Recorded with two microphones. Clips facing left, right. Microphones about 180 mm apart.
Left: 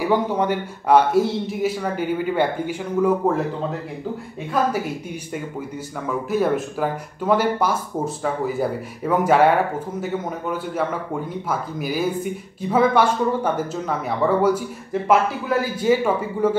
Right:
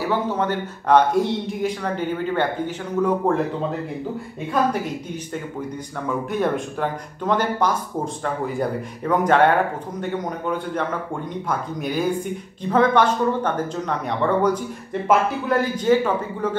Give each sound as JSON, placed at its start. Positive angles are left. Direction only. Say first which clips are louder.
{"t": 0.0, "sound": "a man's voice", "louder": "left 2 dB", "side_deg": 15}
{"t": 6.3, "sound": "a man's voice", "louder": "left 4 dB", "side_deg": 5}